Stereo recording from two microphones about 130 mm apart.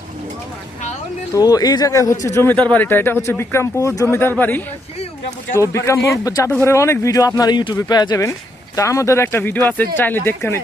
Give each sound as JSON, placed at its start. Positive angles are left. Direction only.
{"t": 1.4, "sound": "speech", "side_deg": 30}